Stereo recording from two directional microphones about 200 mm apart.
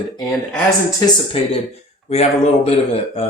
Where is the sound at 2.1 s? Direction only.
30° left (ahead or behind).